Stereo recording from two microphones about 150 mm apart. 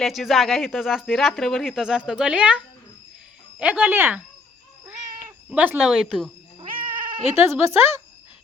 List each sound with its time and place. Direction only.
0.0 s a woman's voice: centre (ahead or behind)
5.5 s speech: 10° right (ahead or behind)
6.6 s cat: 35° right (ahead or behind)
7.4 s a woman's voice: 15° right (ahead or behind)